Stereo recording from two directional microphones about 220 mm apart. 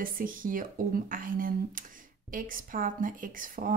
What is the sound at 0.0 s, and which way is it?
A woman's voice, 40° right (ahead or behind).